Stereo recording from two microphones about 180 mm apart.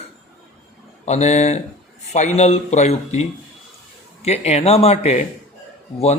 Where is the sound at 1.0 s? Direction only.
40° left (ahead or behind).